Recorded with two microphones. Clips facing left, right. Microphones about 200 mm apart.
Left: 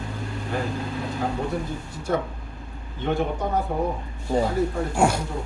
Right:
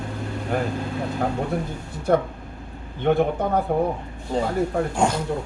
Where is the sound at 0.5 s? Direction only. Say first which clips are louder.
Right 3 dB; 55° right (ahead or behind).